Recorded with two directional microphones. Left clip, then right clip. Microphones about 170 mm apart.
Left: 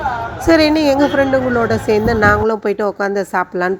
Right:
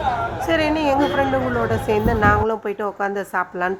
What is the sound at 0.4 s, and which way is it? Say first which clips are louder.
A woman's voice: left 8 dB; 25° left (ahead or behind).